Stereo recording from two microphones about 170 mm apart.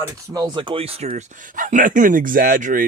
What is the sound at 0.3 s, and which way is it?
Speech, 25° right (ahead or behind).